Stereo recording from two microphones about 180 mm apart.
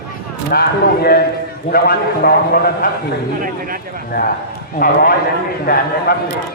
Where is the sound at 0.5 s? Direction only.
65° left (ahead or behind).